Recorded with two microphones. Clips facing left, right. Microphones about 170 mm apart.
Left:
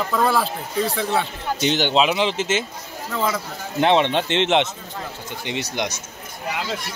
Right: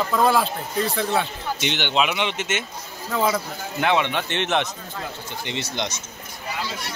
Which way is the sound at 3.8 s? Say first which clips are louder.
Left 4 dB; 25° left (ahead or behind).